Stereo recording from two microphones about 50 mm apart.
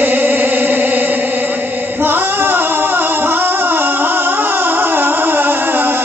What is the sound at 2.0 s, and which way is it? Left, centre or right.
Singing, right.